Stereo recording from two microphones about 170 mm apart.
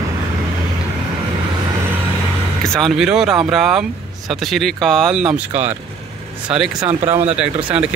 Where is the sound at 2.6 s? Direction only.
Centre (ahead or behind).